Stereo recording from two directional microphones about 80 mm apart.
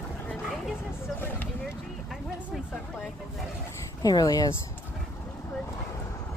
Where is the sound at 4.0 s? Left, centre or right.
Left.